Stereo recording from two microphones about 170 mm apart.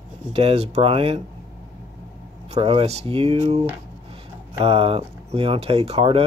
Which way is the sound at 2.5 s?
30° right (ahead or behind).